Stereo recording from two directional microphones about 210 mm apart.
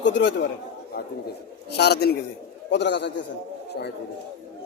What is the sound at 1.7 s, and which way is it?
Speech, 50° left (ahead or behind).